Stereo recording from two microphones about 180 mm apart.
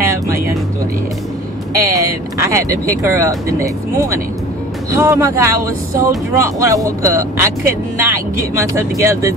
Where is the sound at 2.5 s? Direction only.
15° right (ahead or behind).